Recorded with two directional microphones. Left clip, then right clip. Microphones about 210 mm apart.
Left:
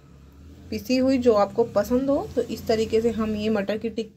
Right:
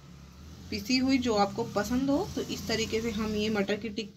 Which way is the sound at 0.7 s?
35° left (ahead or behind).